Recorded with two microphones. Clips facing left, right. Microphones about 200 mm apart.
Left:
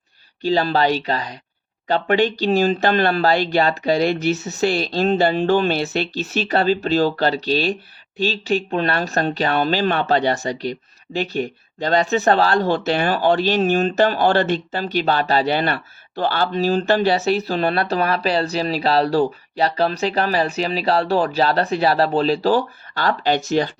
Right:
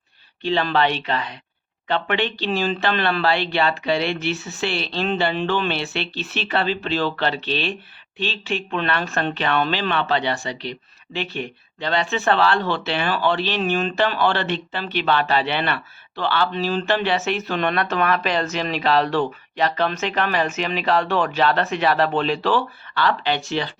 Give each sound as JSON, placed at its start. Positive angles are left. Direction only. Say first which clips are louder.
{"t": 0.4, "sound": "speech", "louder": "left 3 dB", "side_deg": 40}